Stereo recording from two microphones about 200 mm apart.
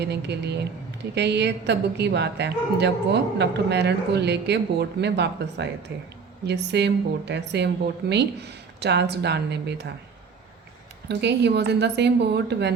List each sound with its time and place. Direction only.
0.0 s a woman's voice: 55° right (ahead or behind)
11.1 s a woman's voice: 60° right (ahead or behind)